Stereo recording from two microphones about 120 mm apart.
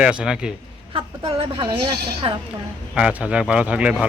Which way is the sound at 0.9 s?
50° right (ahead or behind).